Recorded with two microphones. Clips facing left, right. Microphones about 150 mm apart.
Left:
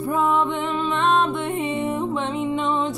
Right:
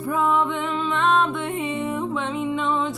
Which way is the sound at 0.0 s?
25° left (ahead or behind).